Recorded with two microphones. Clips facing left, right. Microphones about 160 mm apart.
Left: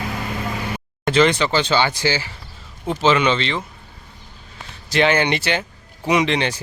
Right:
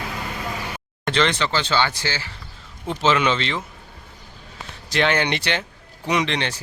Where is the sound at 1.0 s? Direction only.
5° left (ahead or behind).